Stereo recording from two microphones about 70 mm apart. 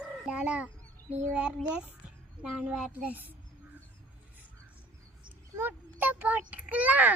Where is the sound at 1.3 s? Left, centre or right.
Centre.